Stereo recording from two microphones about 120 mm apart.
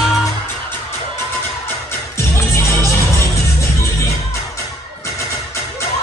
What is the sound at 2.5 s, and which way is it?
Music, 25° left (ahead or behind).